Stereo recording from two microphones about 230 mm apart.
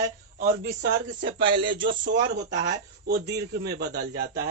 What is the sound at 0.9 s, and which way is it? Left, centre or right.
Speech, right.